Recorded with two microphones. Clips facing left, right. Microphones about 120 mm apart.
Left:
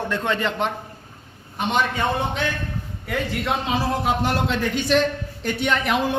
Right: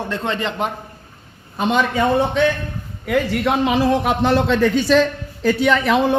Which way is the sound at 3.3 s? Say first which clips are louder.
Right 4 dB; 65° right (ahead or behind).